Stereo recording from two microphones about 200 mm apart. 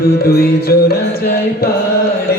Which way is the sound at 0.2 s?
50° left (ahead or behind).